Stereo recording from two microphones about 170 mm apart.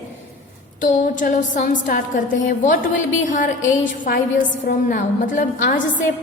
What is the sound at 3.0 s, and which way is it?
Speech, 90° left.